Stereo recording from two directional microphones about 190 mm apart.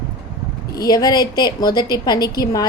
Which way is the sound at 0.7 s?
20° left (ahead or behind).